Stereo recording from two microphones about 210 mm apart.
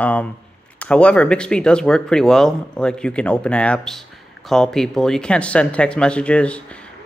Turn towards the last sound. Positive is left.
turn(degrees=5)  # may be behind; listen again after turning